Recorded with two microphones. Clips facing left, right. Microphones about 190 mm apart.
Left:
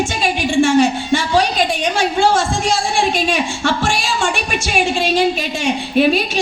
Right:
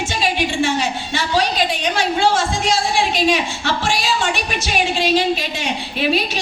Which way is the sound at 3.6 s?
50° left (ahead or behind).